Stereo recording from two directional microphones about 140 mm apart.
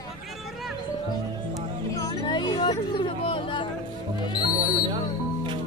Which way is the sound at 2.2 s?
30° left (ahead or behind).